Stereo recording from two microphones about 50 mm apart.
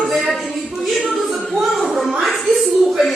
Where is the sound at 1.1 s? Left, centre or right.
Centre.